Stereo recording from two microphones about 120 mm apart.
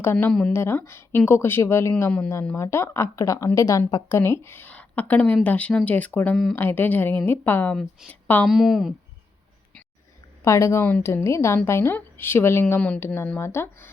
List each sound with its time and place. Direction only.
0.0 s a woman's voice: 20° left (ahead or behind)
0.3 s a woman's voice: 5° left (ahead or behind)
0.5 s a woman's voice: 20° left (ahead or behind)
6.3 s a woman's voice: centre (ahead or behind)
6.6 s a woman's voice: 15° left (ahead or behind)
7.8 s a woman's voice: 5° left (ahead or behind)
10.4 s a woman's voice: 25° left (ahead or behind)